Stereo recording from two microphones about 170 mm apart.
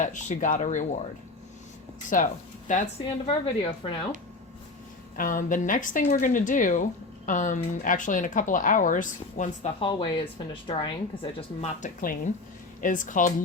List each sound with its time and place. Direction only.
0.0 s speech: 45° left (ahead or behind)
2.1 s speech: 50° left (ahead or behind)
3.2 s a woman's voice: 30° left (ahead or behind)
5.1 s speech: 50° left (ahead or behind)
9.8 s speech: 30° left (ahead or behind)
11.3 s speech: 45° left (ahead or behind)